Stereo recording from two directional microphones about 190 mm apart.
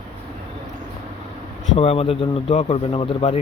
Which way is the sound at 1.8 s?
30° left (ahead or behind).